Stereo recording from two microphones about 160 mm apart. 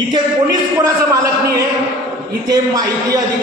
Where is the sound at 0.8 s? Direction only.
20° right (ahead or behind).